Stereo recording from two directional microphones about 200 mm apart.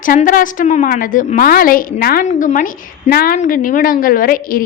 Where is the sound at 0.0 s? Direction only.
40° left (ahead or behind).